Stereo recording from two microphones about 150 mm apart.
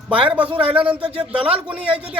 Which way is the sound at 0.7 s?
10° right (ahead or behind).